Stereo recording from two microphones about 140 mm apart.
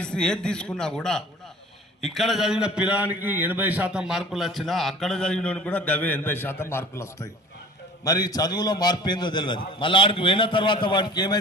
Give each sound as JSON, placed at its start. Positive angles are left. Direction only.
{"t": 0.0, "sound": "a man's voice", "side_deg": 5}